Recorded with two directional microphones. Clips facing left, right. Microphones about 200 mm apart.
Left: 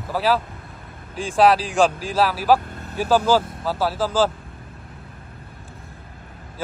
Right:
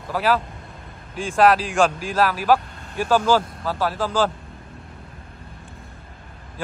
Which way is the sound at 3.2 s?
5° left (ahead or behind).